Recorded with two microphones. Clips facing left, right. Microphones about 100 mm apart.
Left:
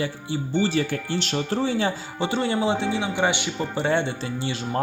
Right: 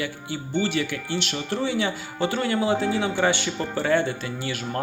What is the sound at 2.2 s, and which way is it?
Speech, 25° left (ahead or behind).